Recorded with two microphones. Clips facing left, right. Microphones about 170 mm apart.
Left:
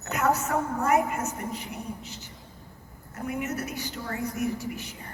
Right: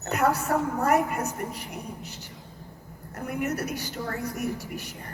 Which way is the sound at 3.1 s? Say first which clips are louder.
Right 2 dB; 55° right (ahead or behind).